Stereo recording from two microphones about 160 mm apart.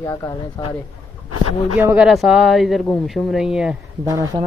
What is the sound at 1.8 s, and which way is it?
Speech, 10° right (ahead or behind).